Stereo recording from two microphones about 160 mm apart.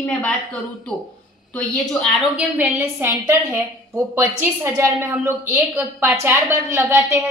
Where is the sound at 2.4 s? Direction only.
15° right (ahead or behind).